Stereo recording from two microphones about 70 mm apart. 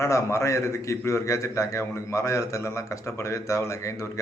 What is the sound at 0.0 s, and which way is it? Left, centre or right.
A man's voice, left.